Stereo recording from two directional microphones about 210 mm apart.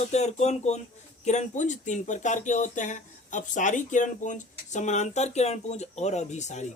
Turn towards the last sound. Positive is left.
turn(degrees=35)  # may be behind; listen again after turning